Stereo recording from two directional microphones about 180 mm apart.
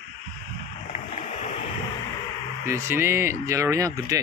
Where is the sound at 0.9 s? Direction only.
40° left (ahead or behind).